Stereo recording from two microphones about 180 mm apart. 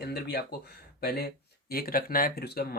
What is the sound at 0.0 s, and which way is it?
Speech, 65° left (ahead or behind).